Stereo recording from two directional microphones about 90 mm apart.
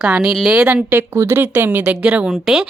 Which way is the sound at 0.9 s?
30° right (ahead or behind).